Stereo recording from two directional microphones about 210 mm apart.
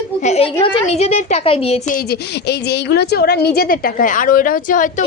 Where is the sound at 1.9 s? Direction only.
50° left (ahead or behind).